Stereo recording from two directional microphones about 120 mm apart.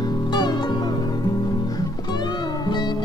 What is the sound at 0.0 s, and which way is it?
Music, 35° left (ahead or behind).